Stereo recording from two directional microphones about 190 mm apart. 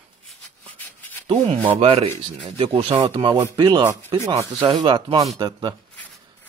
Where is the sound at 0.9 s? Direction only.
10° left (ahead or behind).